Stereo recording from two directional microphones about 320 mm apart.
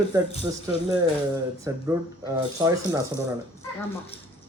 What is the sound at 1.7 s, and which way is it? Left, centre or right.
Speech, centre.